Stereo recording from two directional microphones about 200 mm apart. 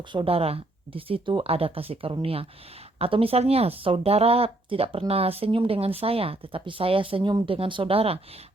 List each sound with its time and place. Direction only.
0.1 s speech: 25° right (ahead or behind)